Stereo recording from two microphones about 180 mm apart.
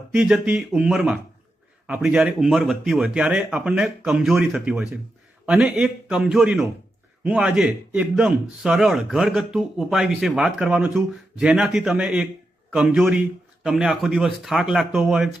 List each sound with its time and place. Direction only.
0.1 s a man's voice: 5° right (ahead or behind)